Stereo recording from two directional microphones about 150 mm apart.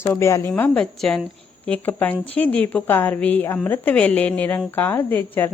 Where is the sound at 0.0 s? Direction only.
15° left (ahead or behind).